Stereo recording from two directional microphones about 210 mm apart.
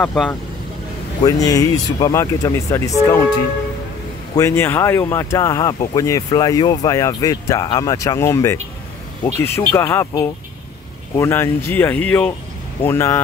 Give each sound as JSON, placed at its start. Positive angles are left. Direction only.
{"t": 0.0, "sound": "speech", "side_deg": 5}
{"t": 1.2, "sound": "speech", "side_deg": 15}
{"t": 4.4, "sound": "speech", "side_deg": 10}